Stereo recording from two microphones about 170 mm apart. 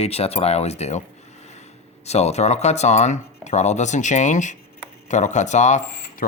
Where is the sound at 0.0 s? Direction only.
40° left (ahead or behind).